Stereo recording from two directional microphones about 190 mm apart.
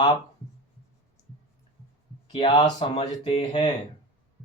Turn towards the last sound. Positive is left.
turn(degrees=30)  # may be behind; listen again after turning